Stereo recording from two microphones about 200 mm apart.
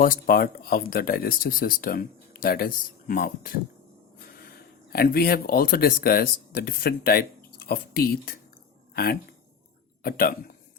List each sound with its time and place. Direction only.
0.0 s speech: 45° left (ahead or behind)
10.0 s speech: 50° left (ahead or behind)